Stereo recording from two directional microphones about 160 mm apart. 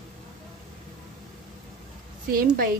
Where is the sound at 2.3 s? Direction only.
65° right (ahead or behind).